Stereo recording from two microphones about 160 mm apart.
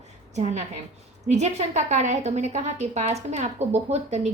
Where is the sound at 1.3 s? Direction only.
45° right (ahead or behind).